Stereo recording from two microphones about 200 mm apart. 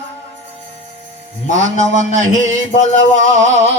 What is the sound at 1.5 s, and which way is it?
Music, 35° left (ahead or behind).